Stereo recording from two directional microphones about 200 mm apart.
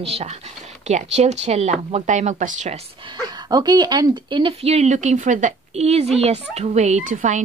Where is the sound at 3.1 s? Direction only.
20° right (ahead or behind).